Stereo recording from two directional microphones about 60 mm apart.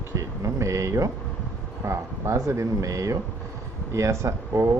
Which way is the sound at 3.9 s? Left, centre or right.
Right.